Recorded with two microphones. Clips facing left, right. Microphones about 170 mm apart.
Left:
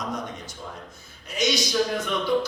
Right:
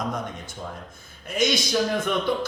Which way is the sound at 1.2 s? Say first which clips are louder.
Right 2 dB; 50° right (ahead or behind).